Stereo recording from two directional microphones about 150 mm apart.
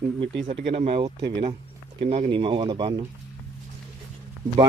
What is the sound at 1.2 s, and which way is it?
Speech, 30° right (ahead or behind).